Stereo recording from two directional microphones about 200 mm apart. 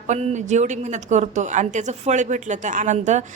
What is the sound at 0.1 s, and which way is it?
A woman's voice, 35° right (ahead or behind).